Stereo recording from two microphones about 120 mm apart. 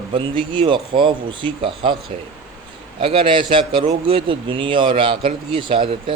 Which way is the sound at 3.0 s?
50° right (ahead or behind).